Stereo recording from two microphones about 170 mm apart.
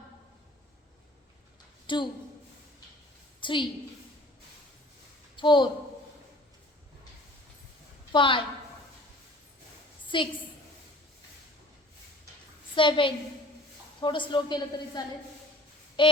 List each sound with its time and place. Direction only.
1.9 s a woman's voice: 30° left (ahead or behind)
3.4 s a woman's voice: 30° left (ahead or behind)
5.4 s speech: 30° left (ahead or behind)
8.1 s a woman's voice: 30° left (ahead or behind)
10.1 s a woman's voice: 30° left (ahead or behind)
12.7 s a woman's voice: 30° left (ahead or behind)